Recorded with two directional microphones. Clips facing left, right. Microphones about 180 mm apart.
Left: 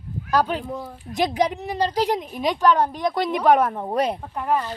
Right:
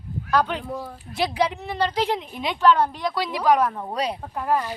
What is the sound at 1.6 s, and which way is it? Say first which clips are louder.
Speech: left 2 dB; 10° left (ahead or behind).